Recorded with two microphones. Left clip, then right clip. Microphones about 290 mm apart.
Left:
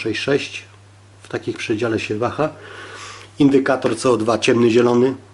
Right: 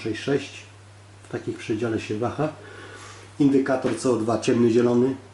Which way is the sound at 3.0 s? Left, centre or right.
Centre.